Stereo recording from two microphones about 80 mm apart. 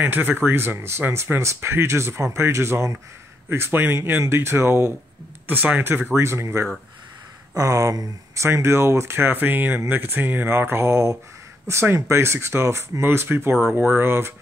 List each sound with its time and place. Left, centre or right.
0.0 s speech: right
5.5 s speech: right
8.5 s speech: right